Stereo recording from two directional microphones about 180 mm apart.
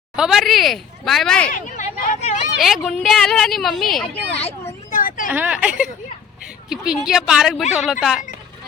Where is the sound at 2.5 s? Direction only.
Centre (ahead or behind).